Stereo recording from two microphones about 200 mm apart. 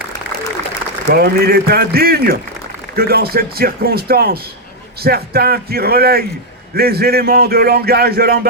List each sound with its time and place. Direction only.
1.0 s a man's voice: 50° right (ahead or behind)